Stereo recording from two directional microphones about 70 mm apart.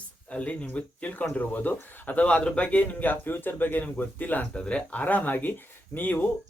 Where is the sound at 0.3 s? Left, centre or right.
Centre.